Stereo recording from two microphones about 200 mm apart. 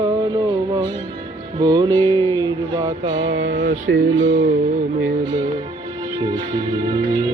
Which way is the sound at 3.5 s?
40° right (ahead or behind).